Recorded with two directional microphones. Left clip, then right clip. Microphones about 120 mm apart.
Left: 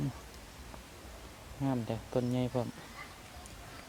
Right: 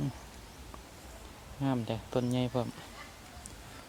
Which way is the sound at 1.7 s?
15° right (ahead or behind).